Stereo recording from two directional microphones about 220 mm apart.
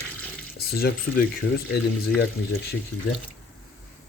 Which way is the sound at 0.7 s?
45° left (ahead or behind).